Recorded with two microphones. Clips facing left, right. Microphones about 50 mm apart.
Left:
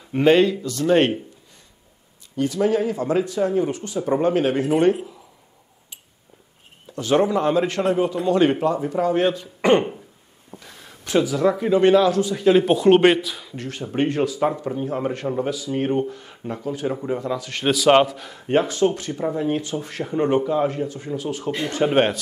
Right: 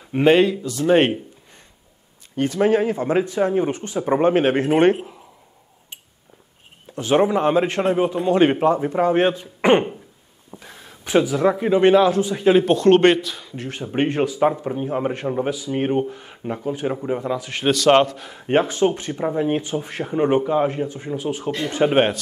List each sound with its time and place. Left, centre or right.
0.1 s a man's voice: centre
2.3 s speech: right
7.0 s speech: right
10.5 s a sound: right
11.1 s speech: right
12.6 s speech: centre
13.9 s a man's voice: right
17.6 s speech: centre
18.5 s a man's voice: right